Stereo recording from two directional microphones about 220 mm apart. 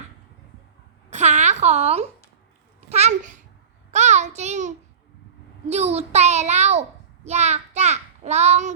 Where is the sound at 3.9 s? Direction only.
30° right (ahead or behind).